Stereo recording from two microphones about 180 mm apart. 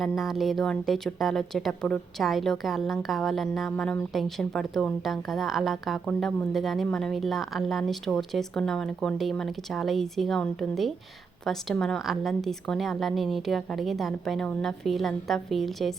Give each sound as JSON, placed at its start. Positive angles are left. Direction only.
{"t": 0.0, "sound": "speech", "side_deg": 0}